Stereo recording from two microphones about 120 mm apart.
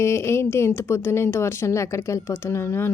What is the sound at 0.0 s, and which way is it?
Speech, 20° left (ahead or behind).